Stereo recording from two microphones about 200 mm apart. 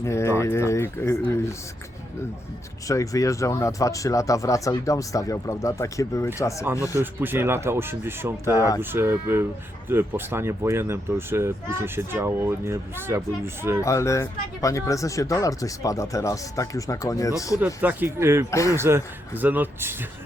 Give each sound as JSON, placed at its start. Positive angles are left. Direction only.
{"t": 0.0, "sound": "speech", "side_deg": 15}
{"t": 2.8, "sound": "speech", "side_deg": 15}
{"t": 6.9, "sound": "speech", "side_deg": -10}
{"t": 8.4, "sound": "speech", "side_deg": 15}
{"t": 8.8, "sound": "speech", "side_deg": -10}
{"t": 13.8, "sound": "speech", "side_deg": 15}
{"t": 17.7, "sound": "speech", "side_deg": -10}
{"t": 18.5, "sound": "speech", "side_deg": 15}
{"t": 18.8, "sound": "speech", "side_deg": -10}